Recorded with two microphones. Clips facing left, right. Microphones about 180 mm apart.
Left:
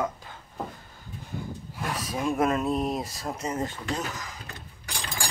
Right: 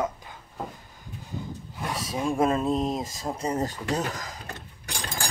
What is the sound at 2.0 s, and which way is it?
Mantra, 25° right (ahead or behind).